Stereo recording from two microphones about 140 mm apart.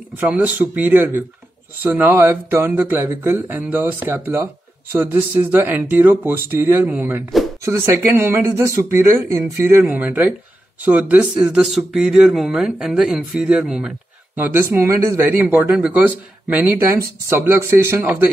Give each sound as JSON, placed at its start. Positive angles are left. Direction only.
{"t": 0.2, "sound": "speech", "side_deg": -10}
{"t": 15.4, "sound": "speech", "side_deg": -5}